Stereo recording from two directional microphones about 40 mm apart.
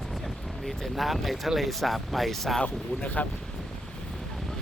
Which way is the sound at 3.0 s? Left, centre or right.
Left.